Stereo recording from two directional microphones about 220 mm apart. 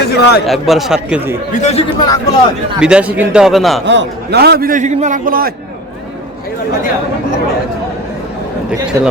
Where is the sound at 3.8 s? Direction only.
55° right (ahead or behind).